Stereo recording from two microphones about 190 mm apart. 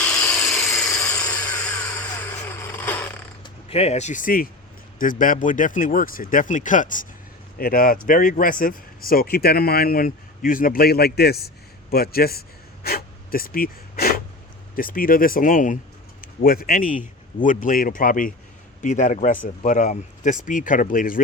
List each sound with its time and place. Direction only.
0.0 s a sound: 5° left (ahead or behind)
1.0 s a sound: 20° left (ahead or behind)
1.6 s vehicle: 5° left (ahead or behind)
3.4 s speech: 30° left (ahead or behind); by 11.3 s 55° left (ahead or behind)
11.4 s gasp: 55° left (ahead or behind)
14.8 s a man's voice: 50° left (ahead or behind)